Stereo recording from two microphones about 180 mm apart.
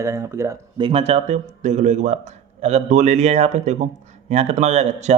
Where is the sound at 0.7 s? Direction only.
30° right (ahead or behind).